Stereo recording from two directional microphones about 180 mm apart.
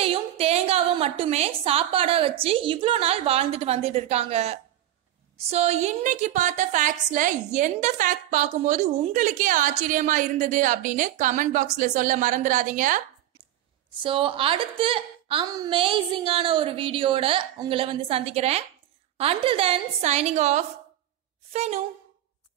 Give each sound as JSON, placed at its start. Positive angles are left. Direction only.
{"t": 0.0, "sound": "a sound", "side_deg": -35}
{"t": 2.4, "sound": "a woman's voice", "side_deg": -30}
{"t": 13.8, "sound": "a woman's voice", "side_deg": -30}